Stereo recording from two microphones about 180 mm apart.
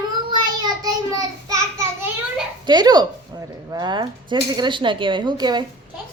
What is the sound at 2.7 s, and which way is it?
Speech, 25° right (ahead or behind).